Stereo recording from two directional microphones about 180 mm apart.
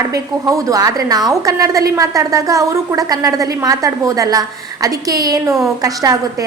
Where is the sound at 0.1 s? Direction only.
20° right (ahead or behind).